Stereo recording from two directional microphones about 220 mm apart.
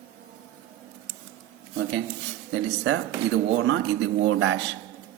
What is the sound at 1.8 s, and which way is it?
A man's voice, 55° right (ahead or behind).